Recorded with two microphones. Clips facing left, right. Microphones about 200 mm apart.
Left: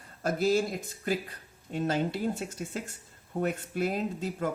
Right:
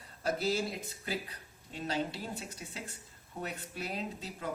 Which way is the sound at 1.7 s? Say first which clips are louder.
Left 7 dB; 50° left (ahead or behind).